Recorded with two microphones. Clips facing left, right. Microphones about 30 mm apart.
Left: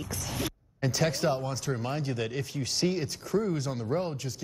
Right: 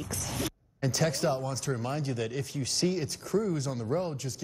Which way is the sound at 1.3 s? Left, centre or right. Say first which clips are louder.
Left 1 dB; left.